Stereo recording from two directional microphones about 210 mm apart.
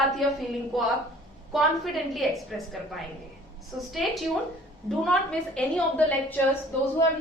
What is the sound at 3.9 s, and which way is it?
A woman's voice, centre (ahead or behind).